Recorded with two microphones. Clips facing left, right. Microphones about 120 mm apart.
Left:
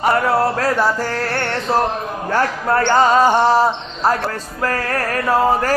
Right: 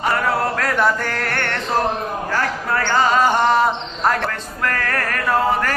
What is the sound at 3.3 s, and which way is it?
Mantra, 35° left (ahead or behind).